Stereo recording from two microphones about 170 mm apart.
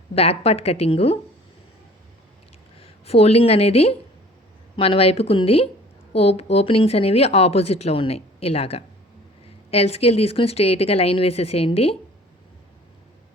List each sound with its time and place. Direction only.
0.1 s speech: 35° left (ahead or behind)
2.7 s speech: 35° left (ahead or behind)